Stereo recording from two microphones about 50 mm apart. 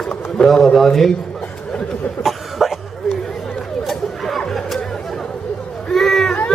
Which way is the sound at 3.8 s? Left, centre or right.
Centre.